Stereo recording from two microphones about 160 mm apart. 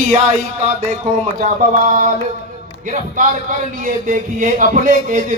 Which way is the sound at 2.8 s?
50° right (ahead or behind).